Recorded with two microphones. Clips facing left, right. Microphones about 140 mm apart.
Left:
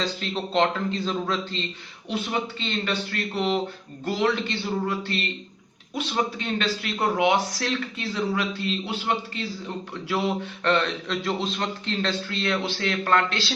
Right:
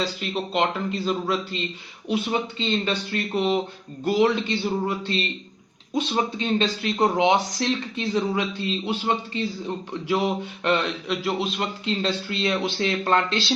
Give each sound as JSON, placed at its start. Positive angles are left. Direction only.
{"t": 0.0, "sound": "a man's voice", "side_deg": -5}